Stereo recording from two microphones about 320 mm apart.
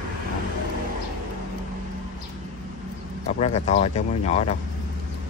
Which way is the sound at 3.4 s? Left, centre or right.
Centre.